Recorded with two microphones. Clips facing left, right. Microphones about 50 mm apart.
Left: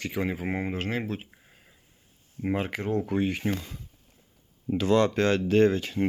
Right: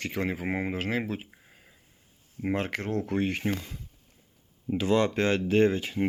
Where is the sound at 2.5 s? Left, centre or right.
Right.